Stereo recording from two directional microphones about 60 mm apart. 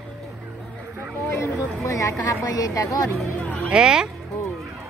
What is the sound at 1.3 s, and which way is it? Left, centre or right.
A woman's voice, left.